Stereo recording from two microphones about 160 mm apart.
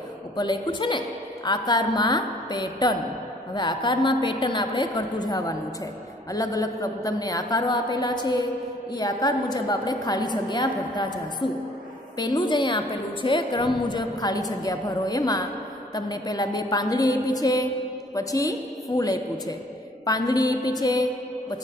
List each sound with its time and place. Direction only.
0.4 s a woman's voice: 30° left (ahead or behind)
12.2 s a woman's voice: 25° left (ahead or behind)